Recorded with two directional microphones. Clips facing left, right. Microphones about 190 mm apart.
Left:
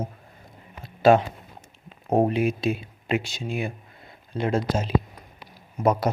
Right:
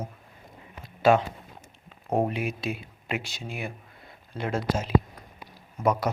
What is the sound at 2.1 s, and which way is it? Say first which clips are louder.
Speech: left 5 dB; 25° left (ahead or behind).